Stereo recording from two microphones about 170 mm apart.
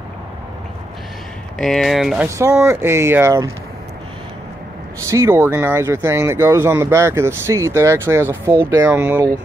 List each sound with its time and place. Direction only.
1.6 s speech: centre (ahead or behind)
2.2 s speech: 15° right (ahead or behind)
5.0 s speech: 20° right (ahead or behind)